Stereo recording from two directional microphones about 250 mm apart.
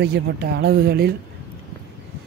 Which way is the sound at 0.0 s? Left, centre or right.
Right.